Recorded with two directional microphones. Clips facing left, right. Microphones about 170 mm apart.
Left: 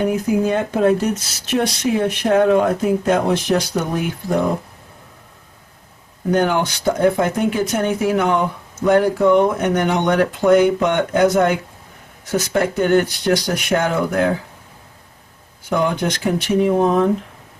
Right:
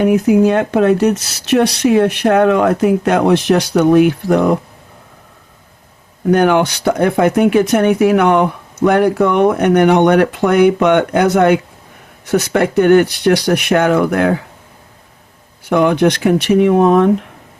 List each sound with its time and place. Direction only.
0.0 s speech: 70° right (ahead or behind)
6.3 s speech: 70° right (ahead or behind)
15.7 s speech: 70° right (ahead or behind)